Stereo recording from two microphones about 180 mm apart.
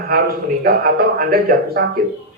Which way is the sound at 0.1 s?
55° right (ahead or behind).